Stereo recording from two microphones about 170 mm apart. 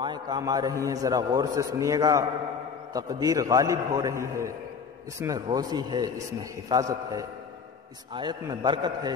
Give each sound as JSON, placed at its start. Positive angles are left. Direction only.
{"t": 0.0, "sound": "a man's voice", "side_deg": -25}